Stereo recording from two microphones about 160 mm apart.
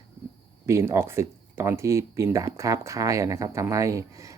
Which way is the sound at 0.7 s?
20° right (ahead or behind).